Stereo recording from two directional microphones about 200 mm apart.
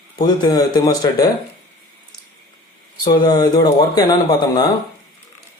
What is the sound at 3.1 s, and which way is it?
Speech, 20° left (ahead or behind).